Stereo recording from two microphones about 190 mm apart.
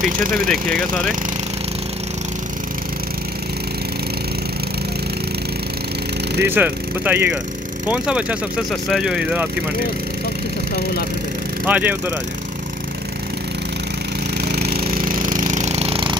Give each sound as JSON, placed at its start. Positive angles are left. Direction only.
{"t": 0.5, "sound": "speech", "side_deg": 5}
{"t": 6.4, "sound": "speech", "side_deg": -10}
{"t": 11.6, "sound": "speech", "side_deg": -10}
{"t": 14.5, "sound": "a sound", "side_deg": -55}